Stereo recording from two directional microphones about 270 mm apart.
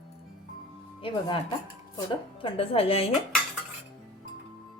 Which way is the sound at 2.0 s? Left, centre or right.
Centre.